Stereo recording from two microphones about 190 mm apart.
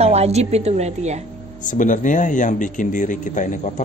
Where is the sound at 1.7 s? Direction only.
40° left (ahead or behind).